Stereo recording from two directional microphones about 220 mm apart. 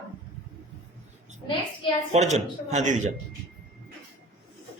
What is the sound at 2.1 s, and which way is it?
Speech, 30° right (ahead or behind).